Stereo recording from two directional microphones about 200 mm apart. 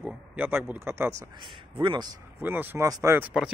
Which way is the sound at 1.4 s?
25° right (ahead or behind).